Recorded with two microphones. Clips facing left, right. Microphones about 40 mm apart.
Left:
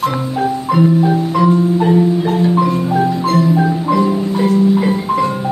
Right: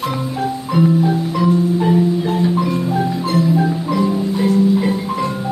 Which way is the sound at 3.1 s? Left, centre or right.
Centre.